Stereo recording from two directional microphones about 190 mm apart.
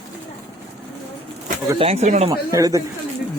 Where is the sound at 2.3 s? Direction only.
20° right (ahead or behind).